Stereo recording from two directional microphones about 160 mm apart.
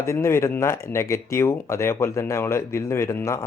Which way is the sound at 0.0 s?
15° left (ahead or behind).